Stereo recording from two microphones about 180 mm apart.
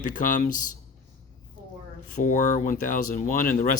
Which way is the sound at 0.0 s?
45° left (ahead or behind).